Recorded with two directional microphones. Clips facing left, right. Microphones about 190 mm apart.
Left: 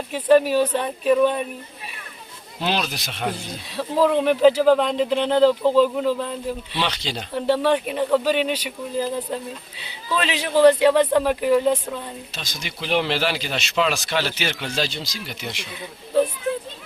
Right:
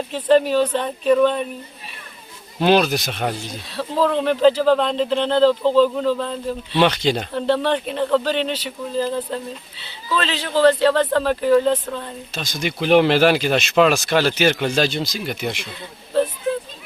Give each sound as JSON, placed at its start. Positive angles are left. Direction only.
{"t": 0.1, "sound": "speech", "side_deg": 10}
{"t": 2.6, "sound": "speech", "side_deg": -50}
{"t": 3.7, "sound": "speech", "side_deg": 10}
{"t": 6.7, "sound": "speech", "side_deg": -50}
{"t": 7.3, "sound": "speech", "side_deg": 10}
{"t": 12.3, "sound": "speech", "side_deg": -50}